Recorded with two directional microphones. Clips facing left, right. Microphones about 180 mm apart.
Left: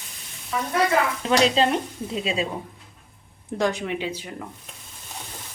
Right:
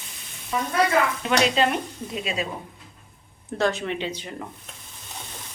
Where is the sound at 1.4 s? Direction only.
30° left (ahead or behind).